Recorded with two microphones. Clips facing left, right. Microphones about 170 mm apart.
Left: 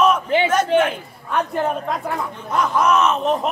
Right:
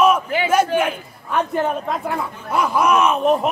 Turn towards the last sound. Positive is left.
turn(degrees=-10)  # may be behind; listen again after turning